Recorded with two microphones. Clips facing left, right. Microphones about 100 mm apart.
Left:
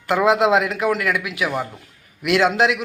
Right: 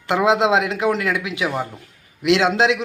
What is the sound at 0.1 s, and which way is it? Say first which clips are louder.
A man's voice: left 1 dB; 25° right (ahead or behind).